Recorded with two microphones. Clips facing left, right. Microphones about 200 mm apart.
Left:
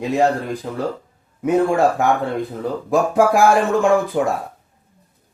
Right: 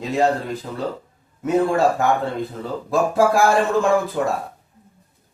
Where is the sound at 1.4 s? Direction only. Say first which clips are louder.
Left 2 dB; 15° left (ahead or behind).